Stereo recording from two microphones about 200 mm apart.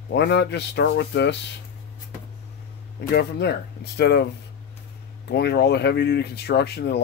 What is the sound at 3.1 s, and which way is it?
Speech, 55° left (ahead or behind).